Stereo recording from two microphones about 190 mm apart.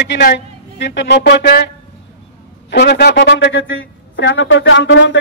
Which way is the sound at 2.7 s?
60° left (ahead or behind).